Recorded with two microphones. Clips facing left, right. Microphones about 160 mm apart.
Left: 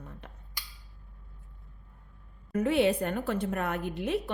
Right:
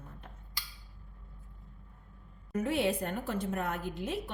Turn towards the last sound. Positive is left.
turn(degrees=70)  # may be behind; listen again after turning